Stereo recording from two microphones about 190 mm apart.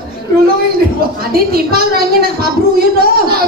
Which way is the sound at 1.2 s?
50° right (ahead or behind).